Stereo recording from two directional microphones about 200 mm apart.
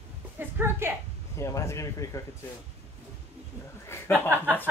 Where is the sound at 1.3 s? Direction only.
15° left (ahead or behind).